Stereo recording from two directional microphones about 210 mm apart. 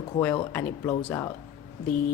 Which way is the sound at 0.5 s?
10° left (ahead or behind).